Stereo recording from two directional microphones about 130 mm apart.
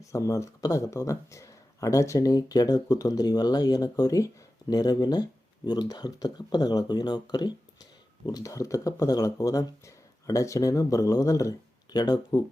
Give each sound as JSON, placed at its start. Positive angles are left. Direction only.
{"t": 0.0, "sound": "speech", "side_deg": 25}